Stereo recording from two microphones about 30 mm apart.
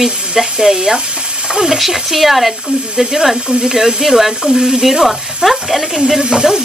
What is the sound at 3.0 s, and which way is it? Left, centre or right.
Speech, centre.